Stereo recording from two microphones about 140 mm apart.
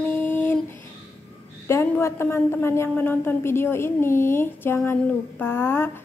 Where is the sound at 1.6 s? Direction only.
20° left (ahead or behind).